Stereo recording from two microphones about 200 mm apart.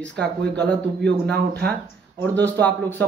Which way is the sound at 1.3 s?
55° right (ahead or behind).